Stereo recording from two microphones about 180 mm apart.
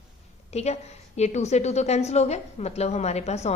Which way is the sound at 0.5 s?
35° left (ahead or behind).